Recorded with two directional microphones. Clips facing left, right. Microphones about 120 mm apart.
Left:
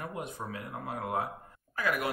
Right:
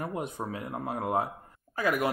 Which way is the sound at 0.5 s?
30° right (ahead or behind).